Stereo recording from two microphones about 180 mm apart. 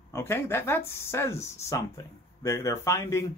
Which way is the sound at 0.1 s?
15° left (ahead or behind).